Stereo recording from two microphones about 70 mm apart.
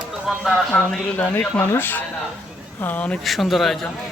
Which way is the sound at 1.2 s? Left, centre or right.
Left.